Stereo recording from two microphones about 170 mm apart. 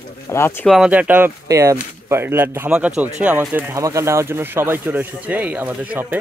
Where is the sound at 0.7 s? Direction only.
5° right (ahead or behind).